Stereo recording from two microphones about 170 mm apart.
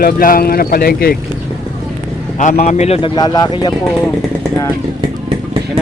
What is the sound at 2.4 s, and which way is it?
Speech, 45° left (ahead or behind).